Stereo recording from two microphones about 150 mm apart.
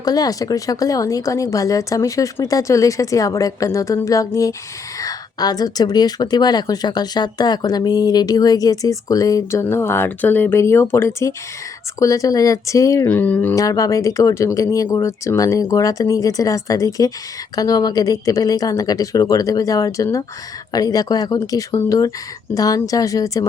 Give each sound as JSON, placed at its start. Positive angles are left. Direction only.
{"t": 0.0, "sound": "a woman's voice", "side_deg": 25}
{"t": 13.6, "sound": "a woman's voice", "side_deg": 20}